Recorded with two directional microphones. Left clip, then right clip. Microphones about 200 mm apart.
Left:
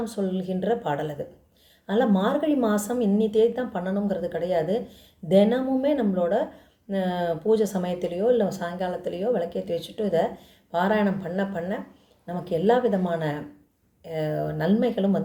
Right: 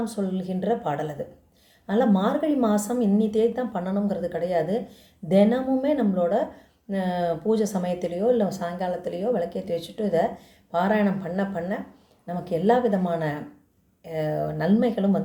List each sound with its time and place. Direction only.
0.0 s speech: 5° left (ahead or behind)